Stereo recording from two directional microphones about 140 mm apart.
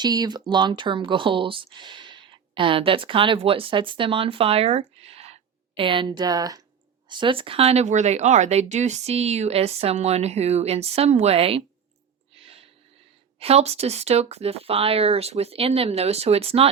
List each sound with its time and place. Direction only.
0.0 s speech: 30° right (ahead or behind)
12.4 s a sound: 45° right (ahead or behind)
13.4 s speech: 50° right (ahead or behind)